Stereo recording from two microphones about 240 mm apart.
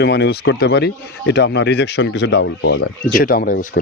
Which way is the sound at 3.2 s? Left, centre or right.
Left.